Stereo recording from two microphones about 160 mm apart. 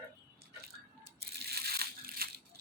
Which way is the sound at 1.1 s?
80° right.